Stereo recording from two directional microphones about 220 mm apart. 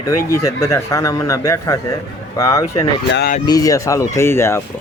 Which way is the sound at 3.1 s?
45° left (ahead or behind).